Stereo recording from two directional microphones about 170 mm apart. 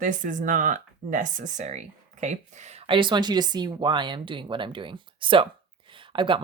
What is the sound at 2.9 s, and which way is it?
Speech, 30° right (ahead or behind).